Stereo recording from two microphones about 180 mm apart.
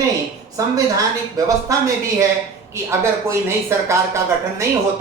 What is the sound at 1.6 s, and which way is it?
Speech, 15° right (ahead or behind).